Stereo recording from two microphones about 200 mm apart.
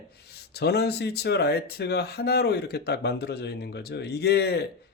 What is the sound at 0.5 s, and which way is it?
Speech, 55° left (ahead or behind).